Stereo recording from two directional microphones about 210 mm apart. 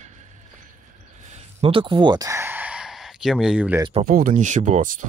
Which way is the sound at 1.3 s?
25° right (ahead or behind).